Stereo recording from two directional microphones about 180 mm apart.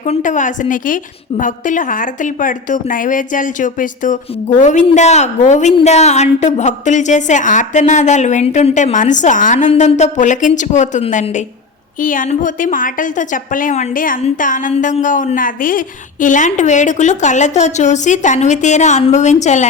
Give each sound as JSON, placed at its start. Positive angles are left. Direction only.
{"t": 0.0, "sound": "a woman's voice", "side_deg": 45}